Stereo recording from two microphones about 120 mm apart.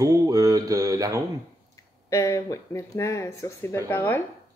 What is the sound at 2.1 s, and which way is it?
Speech, 25° left (ahead or behind).